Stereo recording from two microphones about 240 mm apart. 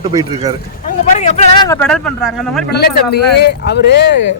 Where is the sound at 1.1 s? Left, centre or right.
Left.